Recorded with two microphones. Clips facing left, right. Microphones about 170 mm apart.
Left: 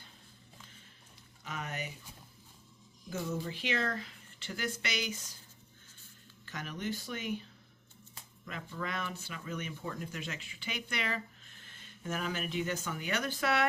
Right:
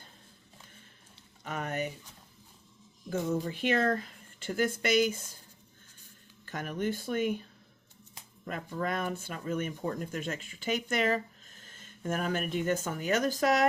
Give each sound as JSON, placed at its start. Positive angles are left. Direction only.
{"t": 1.5, "sound": "speech", "side_deg": -50}
{"t": 3.1, "sound": "speech", "side_deg": -50}
{"t": 6.4, "sound": "speech", "side_deg": -50}
{"t": 8.4, "sound": "speech", "side_deg": -45}